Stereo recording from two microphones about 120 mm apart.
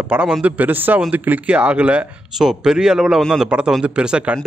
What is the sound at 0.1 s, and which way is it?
Speech, 10° right (ahead or behind).